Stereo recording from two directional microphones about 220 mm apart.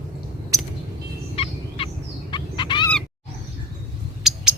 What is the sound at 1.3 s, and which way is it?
Fowl, 25° left (ahead or behind).